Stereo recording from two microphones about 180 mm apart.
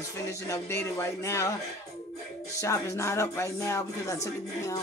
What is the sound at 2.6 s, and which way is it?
Speech, 15° left (ahead or behind).